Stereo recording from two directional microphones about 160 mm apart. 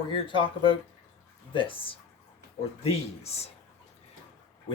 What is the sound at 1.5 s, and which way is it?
Speech, 35° left (ahead or behind).